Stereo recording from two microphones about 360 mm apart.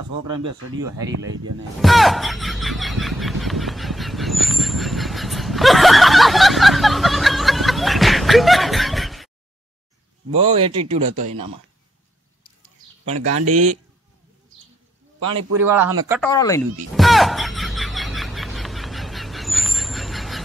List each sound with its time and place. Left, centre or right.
0.3 s speech: centre
1.0 s speech: right
1.8 s a sound: centre
10.3 s speech: centre
15.3 s a man's voice: centre
16.2 s speech: centre
16.9 s a sound: centre